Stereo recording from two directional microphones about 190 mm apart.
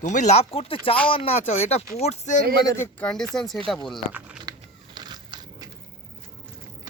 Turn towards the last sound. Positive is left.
turn(degrees=-20)  # may be behind; listen again after turning